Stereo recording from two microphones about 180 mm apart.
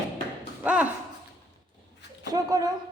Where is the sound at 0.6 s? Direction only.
10° right (ahead or behind).